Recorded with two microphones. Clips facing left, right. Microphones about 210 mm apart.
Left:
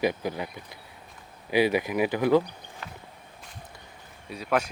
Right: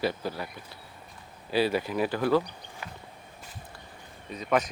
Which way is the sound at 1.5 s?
15° left (ahead or behind).